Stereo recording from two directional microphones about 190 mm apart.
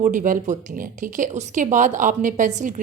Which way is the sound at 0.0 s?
45° right (ahead or behind).